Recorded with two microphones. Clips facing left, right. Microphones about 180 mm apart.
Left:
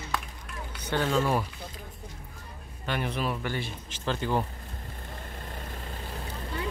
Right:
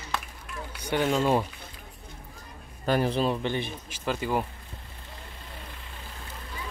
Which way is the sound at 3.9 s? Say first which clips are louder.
Even; 10° right (ahead or behind).